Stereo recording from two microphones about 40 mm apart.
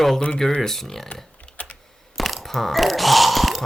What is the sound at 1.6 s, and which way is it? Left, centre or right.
Computer keyboard, left.